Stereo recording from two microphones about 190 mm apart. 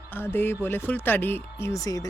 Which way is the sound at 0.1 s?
10° left (ahead or behind).